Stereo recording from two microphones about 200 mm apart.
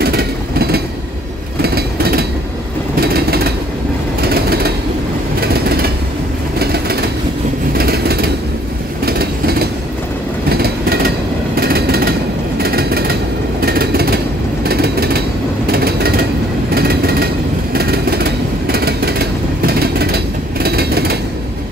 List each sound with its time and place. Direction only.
0.0 s train: 50° right (ahead or behind)
1.6 s vehicle: 50° right (ahead or behind)
4.2 s train: 50° right (ahead or behind)
6.6 s vehicle: 50° right (ahead or behind)
9.0 s train: 50° right (ahead or behind)
11.5 s vehicle: 50° right (ahead or behind)
15.7 s a sound: 50° right (ahead or behind)
16.7 s vehicle: 50° right (ahead or behind)